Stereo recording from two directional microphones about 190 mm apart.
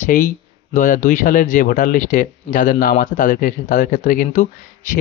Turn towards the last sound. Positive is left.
turn(degrees=45)  # may be behind; listen again after turning